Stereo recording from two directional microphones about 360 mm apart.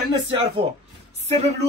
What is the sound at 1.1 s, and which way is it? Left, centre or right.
Speech, centre.